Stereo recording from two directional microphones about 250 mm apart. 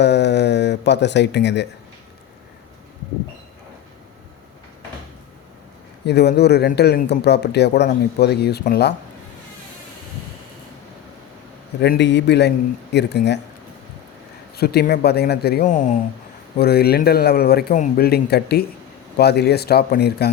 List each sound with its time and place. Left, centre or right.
0.0 s a sound: left
6.1 s speech: left
11.8 s speech: left
14.5 s speech: left